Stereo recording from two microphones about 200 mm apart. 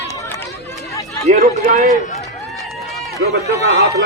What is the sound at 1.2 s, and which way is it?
Speech, 40° right (ahead or behind).